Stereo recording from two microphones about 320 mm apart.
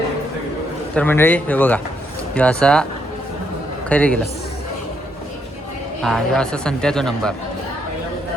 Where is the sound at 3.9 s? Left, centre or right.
Centre.